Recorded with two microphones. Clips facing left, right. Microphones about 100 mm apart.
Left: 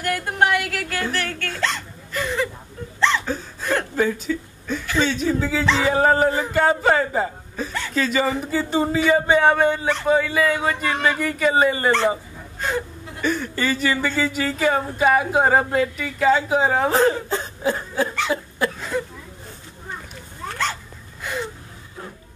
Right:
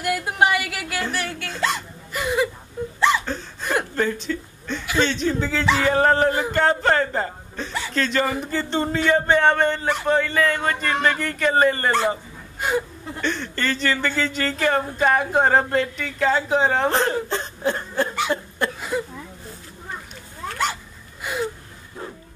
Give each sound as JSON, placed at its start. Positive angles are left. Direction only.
{"t": 0.0, "sound": "speech", "side_deg": -5}
{"t": 1.5, "sound": "hiccup", "side_deg": -10}
{"t": 2.8, "sound": "a sound", "side_deg": -15}
{"t": 3.9, "sound": "a sound", "side_deg": 5}
{"t": 4.9, "sound": "speech", "side_deg": 5}
{"t": 12.5, "sound": "wail", "side_deg": -10}
{"t": 13.2, "sound": "speech", "side_deg": 10}
{"t": 18.8, "sound": "a sound", "side_deg": -10}
{"t": 21.2, "sound": "gasp", "side_deg": -10}